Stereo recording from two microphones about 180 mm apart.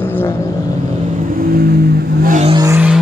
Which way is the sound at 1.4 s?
60° right (ahead or behind).